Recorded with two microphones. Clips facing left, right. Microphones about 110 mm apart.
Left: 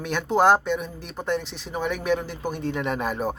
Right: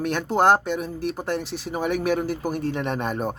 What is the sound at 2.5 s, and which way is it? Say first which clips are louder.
Speech: right 2 dB; 40° right (ahead or behind).